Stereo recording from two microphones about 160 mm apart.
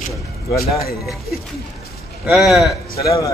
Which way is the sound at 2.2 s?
Centre (ahead or behind).